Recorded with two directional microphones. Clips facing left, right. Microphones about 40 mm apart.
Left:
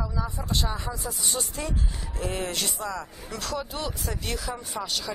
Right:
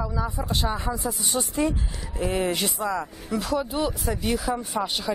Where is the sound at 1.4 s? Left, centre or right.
Right.